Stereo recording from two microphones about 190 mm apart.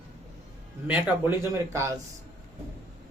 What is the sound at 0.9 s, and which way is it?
Speech, 5° right (ahead or behind).